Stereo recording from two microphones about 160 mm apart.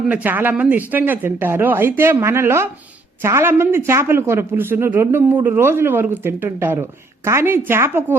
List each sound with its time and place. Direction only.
0.1 s a man's voice: 10° right (ahead or behind)